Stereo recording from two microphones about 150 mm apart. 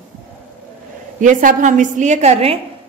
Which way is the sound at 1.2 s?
60° right (ahead or behind).